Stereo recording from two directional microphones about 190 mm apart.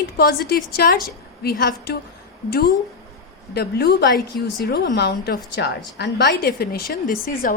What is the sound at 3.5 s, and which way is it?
A woman's voice, 55° left (ahead or behind).